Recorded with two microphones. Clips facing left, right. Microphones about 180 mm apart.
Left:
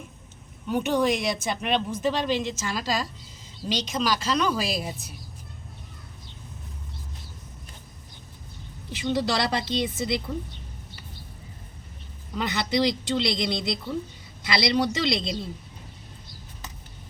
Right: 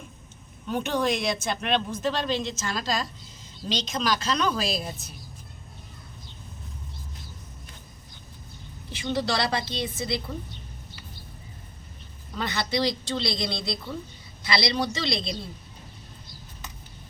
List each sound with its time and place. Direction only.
0.7 s speech: 10° left (ahead or behind)
8.9 s speech: 15° left (ahead or behind)
12.4 s speech: 20° left (ahead or behind)